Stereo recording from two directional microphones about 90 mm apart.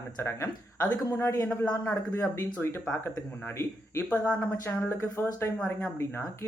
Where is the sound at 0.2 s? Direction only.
30° left (ahead or behind).